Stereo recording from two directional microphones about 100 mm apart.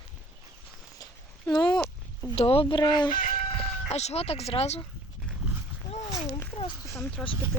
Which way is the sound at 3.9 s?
90° left.